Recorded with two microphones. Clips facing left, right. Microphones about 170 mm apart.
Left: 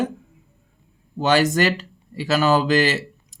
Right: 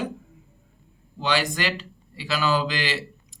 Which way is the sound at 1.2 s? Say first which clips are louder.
Left 7 dB; 45° left (ahead or behind).